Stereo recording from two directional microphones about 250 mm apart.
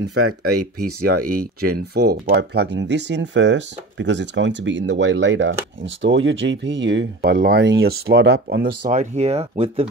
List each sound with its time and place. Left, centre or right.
0.1 s speech: right
1.2 s speech: right